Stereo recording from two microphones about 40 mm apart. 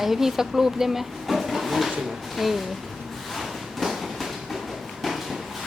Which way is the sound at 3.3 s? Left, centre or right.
Centre.